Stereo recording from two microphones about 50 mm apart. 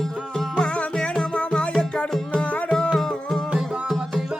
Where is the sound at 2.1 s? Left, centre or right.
Centre.